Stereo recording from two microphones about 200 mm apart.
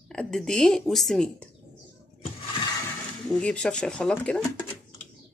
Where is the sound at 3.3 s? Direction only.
5° left (ahead or behind).